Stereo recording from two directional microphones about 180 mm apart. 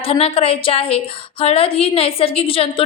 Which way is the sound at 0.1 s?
30° left (ahead or behind).